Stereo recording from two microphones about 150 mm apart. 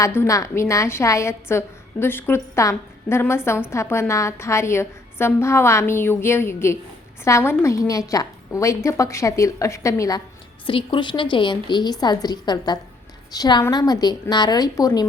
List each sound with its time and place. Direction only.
0.0 s a woman's voice: 20° left (ahead or behind)
10.7 s a woman's voice: 35° left (ahead or behind)